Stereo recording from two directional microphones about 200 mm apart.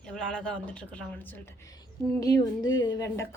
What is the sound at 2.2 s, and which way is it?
A woman's voice, 20° left (ahead or behind).